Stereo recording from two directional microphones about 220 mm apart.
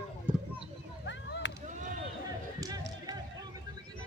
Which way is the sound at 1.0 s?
55° left (ahead or behind).